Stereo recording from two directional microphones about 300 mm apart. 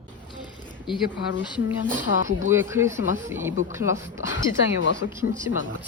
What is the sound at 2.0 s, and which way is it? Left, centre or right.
Speech, right.